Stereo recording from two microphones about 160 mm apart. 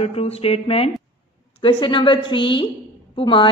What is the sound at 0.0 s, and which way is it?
A woman's voice, 40° left (ahead or behind).